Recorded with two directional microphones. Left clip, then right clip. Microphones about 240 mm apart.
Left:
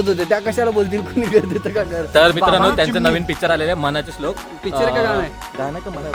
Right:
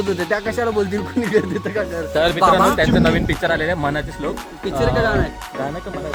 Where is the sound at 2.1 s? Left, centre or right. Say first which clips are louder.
Left 6 dB; left.